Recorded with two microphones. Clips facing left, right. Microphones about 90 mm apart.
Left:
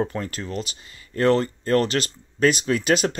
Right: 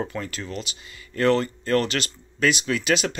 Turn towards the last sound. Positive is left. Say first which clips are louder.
# left 3 dB
turn(degrees=40)  # may be behind; listen again after turning